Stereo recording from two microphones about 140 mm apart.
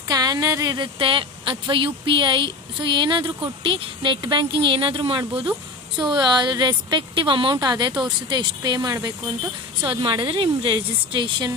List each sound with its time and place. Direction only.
0.1 s speech: 30° right (ahead or behind)